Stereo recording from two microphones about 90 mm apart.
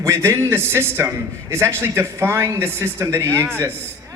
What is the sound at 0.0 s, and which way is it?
A man's voice, 30° right (ahead or behind).